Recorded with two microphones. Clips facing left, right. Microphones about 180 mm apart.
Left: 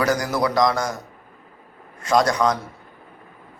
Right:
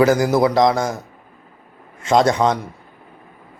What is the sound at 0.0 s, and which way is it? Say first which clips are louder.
Speech: right 7 dB; 25° right (ahead or behind).